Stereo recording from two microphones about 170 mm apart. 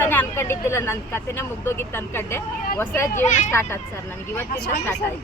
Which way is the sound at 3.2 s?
45° left (ahead or behind).